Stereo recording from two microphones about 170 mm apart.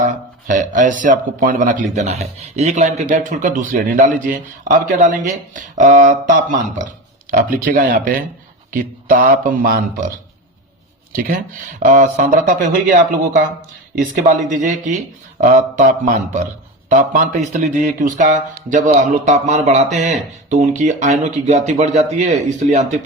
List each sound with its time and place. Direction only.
0.4 s speech: 50° right (ahead or behind)
11.1 s speech: 55° right (ahead or behind)
14.0 s speech: 45° right (ahead or behind)